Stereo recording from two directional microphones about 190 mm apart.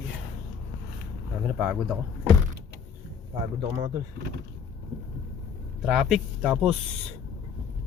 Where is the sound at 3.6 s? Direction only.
20° right (ahead or behind).